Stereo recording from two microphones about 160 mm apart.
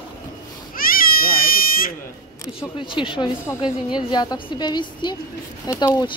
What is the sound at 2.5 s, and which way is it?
A woman's voice, 30° left (ahead or behind).